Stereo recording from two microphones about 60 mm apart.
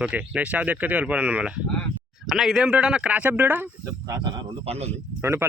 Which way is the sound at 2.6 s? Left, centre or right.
Centre.